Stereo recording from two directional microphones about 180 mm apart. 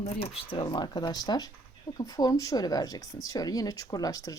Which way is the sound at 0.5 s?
25° left (ahead or behind).